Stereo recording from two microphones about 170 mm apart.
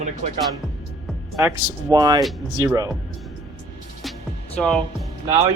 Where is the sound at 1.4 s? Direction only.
20° right (ahead or behind).